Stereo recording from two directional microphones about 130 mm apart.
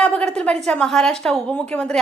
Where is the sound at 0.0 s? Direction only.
5° left (ahead or behind).